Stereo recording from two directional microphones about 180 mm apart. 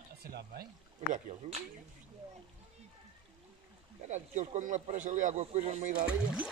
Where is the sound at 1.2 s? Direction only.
35° right (ahead or behind).